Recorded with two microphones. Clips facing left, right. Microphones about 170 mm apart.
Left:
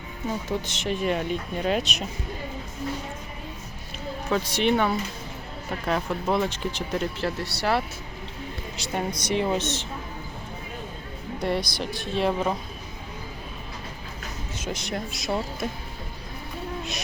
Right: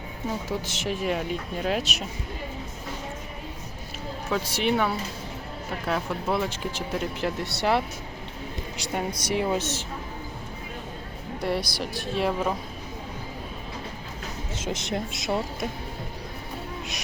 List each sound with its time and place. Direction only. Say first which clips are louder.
0.4 s speech: left 1 dB; 5° right (ahead or behind)
4.3 s speech: left 2 dB; 5° right (ahead or behind)
6.3 s speech: left 2 dB; 5° right (ahead or behind); by 7.8 s 20° right (ahead or behind)
8.8 s speech: left 1 dB; 10° right (ahead or behind)
11.4 s speech: left 1 dB; 5° right (ahead or behind)
14.6 s speech: right 1 dB; 25° right (ahead or behind)